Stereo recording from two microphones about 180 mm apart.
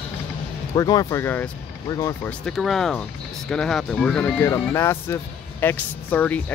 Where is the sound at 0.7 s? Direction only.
20° left (ahead or behind).